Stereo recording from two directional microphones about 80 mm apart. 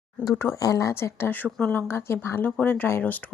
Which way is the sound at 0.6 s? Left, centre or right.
Left.